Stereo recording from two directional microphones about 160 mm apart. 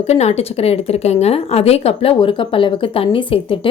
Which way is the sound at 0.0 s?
45° left (ahead or behind).